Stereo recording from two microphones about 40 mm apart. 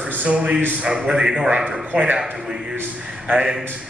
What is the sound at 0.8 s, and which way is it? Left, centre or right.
Speech, right.